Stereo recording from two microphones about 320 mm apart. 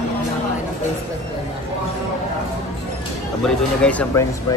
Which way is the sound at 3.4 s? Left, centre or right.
Centre.